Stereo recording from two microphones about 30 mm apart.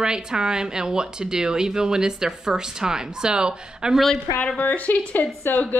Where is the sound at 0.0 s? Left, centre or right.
Right.